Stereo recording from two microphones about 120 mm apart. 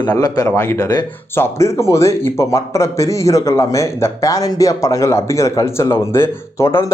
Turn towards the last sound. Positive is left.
turn(degrees=20)  # may be behind; listen again after turning